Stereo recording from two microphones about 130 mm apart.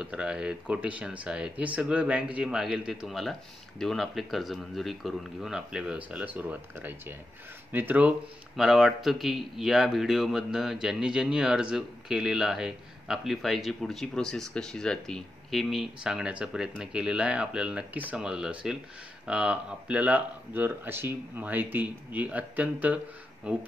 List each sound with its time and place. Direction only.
0.0 s speech: 5° right (ahead or behind)